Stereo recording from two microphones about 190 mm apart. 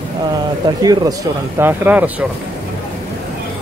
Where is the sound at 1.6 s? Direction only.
10° right (ahead or behind).